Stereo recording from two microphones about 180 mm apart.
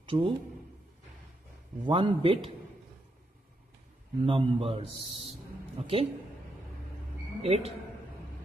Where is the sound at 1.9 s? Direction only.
30° right (ahead or behind).